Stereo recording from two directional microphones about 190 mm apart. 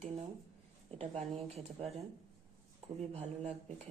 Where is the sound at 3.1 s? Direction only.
35° right (ahead or behind).